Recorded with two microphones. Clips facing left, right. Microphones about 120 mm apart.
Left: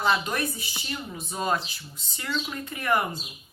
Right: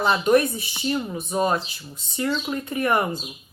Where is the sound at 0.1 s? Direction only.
25° right (ahead or behind).